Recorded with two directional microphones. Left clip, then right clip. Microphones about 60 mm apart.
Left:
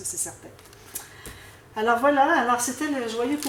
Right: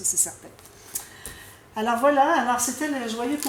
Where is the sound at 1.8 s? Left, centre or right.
Right.